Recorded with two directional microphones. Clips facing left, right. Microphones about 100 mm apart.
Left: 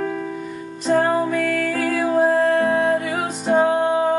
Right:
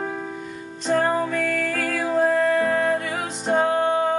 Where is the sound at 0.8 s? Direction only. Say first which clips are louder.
Left 3 dB; 5° left (ahead or behind).